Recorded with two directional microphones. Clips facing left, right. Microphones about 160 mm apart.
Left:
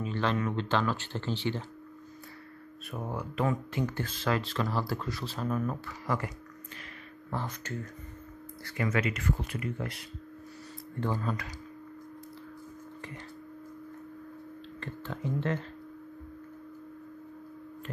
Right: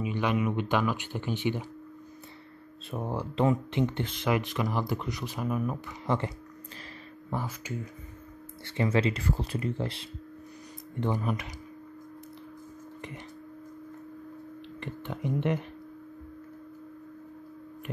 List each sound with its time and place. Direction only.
0.0 s speech: 15° right (ahead or behind)
2.9 s speech: 30° right (ahead or behind); by 5.8 s 10° right (ahead or behind)
6.0 s speech: 25° right (ahead or behind)
7.2 s speech: 10° right (ahead or behind)
8.6 s speech: 30° right (ahead or behind)
11.0 s speech: 20° right (ahead or behind)
14.8 s speech: 20° right (ahead or behind)